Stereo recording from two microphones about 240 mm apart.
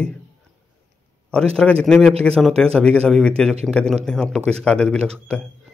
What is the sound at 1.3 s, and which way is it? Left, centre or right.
A man's voice, centre.